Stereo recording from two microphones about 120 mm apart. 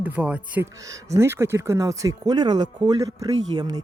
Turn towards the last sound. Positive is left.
turn(degrees=-35)  # may be behind; listen again after turning